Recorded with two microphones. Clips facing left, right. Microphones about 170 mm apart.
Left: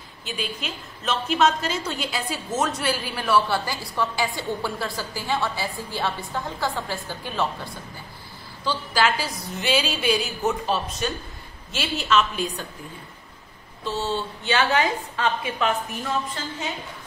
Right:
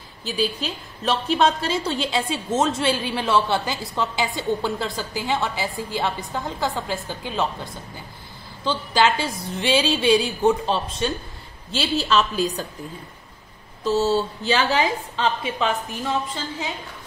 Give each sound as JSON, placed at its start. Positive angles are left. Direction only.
{"t": 0.2, "sound": "a woman's voice", "side_deg": -35}
{"t": 13.8, "sound": "a woman's voice", "side_deg": -40}